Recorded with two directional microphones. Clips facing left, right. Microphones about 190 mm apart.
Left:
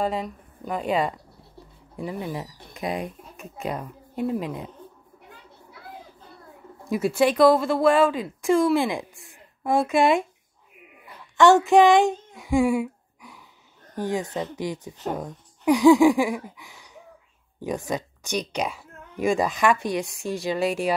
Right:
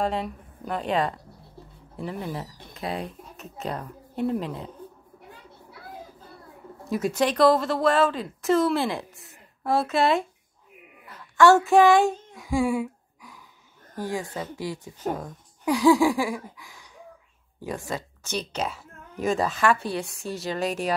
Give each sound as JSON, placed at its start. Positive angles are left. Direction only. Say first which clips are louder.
{"t": 0.0, "sound": "a woman's voice", "louder": "left 1 dB", "side_deg": 5}
{"t": 6.9, "sound": "a woman's voice", "louder": "left 3 dB", "side_deg": 10}
{"t": 11.1, "sound": "a sound", "louder": "left 1 dB", "side_deg": 15}
{"t": 13.9, "sound": "a woman's voice", "louder": "left 3 dB", "side_deg": 20}